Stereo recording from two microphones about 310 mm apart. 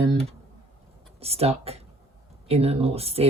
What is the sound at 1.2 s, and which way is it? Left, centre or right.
Speech, centre.